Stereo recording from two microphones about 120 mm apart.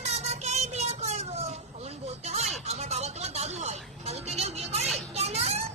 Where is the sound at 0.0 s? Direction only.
65° right (ahead or behind).